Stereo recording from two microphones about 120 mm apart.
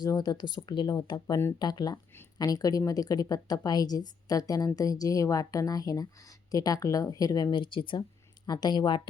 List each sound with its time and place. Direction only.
0.0 s a woman's voice: 35° left (ahead or behind)